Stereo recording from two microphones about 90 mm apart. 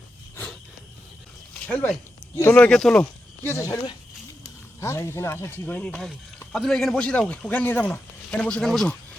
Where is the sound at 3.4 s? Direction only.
35° left (ahead or behind).